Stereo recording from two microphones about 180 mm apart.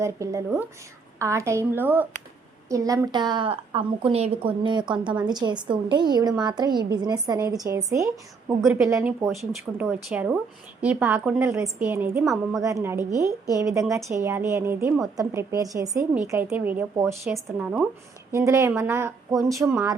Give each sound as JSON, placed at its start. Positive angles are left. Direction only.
{"t": 0.0, "sound": "a woman's voice", "side_deg": -15}
{"t": 9.7, "sound": "a woman's voice", "side_deg": -10}
{"t": 12.2, "sound": "speech", "side_deg": 0}
{"t": 12.6, "sound": "a woman's voice", "side_deg": -15}
{"t": 18.3, "sound": "a woman's voice", "side_deg": -15}